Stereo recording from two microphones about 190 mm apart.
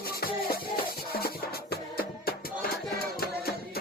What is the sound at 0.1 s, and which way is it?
Music, 50° left (ahead or behind).